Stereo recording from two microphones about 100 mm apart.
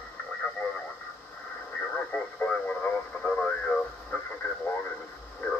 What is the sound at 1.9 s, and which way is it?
Radio, 15° left (ahead or behind).